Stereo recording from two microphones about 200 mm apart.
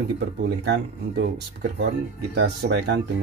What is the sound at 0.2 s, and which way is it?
Speech, 55° right (ahead or behind).